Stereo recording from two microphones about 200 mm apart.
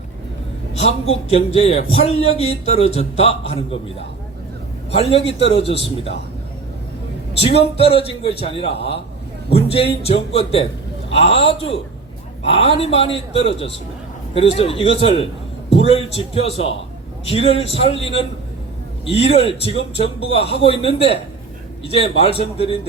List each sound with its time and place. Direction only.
0.7 s a woman's voice: 30° left (ahead or behind)
4.9 s a man's voice: 30° left (ahead or behind)
7.4 s a man's voice: 30° left (ahead or behind)